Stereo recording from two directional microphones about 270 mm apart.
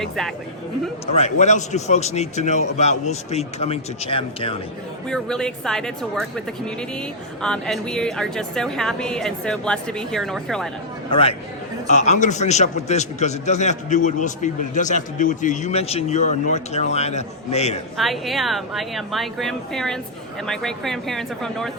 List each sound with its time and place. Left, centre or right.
0.0 s a woman's voice: centre
1.0 s a man's voice: left
5.0 s a woman's voice: centre
7.4 s a woman's voice: centre
11.1 s a man's voice: left
17.9 s a woman's voice: centre